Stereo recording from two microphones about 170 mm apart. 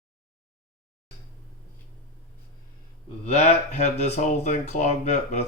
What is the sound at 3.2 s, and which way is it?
Speech, 40° left (ahead or behind).